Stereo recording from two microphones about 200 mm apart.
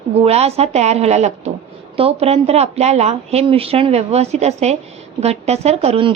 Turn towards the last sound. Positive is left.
turn(degrees=-30)  # may be behind; listen again after turning